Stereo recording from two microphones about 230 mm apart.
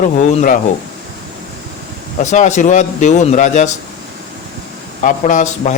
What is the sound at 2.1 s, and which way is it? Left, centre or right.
Speech, left.